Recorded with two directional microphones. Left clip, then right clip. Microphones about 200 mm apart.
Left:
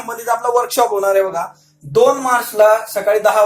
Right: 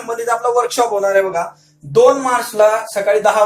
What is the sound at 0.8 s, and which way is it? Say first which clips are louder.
Speech: left 2 dB; 35° left (ahead or behind).